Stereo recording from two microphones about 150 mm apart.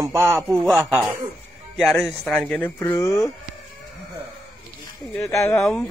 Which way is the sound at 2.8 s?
15° left (ahead or behind).